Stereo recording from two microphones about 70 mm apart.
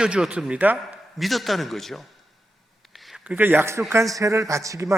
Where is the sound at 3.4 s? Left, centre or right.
Right.